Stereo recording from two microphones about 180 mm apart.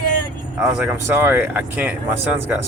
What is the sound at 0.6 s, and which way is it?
Speech, 5° right (ahead or behind).